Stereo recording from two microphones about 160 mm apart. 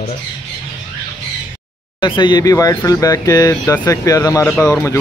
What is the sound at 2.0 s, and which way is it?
Speech, 30° left (ahead or behind).